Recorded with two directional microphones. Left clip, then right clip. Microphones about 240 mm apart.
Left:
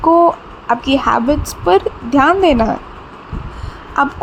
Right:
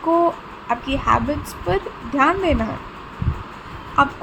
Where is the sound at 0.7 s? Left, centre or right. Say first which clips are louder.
Left 5 dB; left.